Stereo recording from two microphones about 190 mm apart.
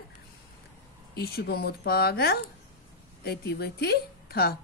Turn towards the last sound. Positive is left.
turn(degrees=55)  # may be behind; listen again after turning